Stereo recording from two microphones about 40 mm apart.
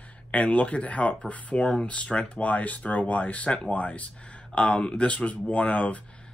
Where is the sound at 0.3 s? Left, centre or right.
Left.